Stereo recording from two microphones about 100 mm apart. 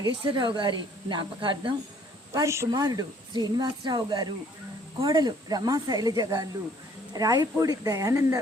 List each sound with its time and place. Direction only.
0.0 s a woman's voice: 50° right (ahead or behind)
2.3 s a woman's voice: 30° right (ahead or behind)